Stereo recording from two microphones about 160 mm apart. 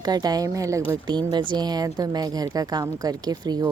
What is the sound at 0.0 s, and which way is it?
Speech, 25° right (ahead or behind).